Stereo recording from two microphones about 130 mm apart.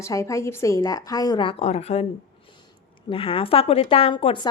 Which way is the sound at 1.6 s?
55° left (ahead or behind).